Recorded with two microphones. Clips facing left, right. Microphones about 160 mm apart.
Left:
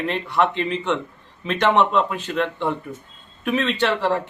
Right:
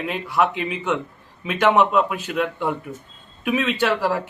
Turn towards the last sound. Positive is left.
turn(degrees=-5)  # may be behind; listen again after turning